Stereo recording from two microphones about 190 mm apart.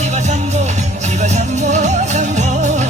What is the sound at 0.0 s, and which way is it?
Music, 40° right (ahead or behind).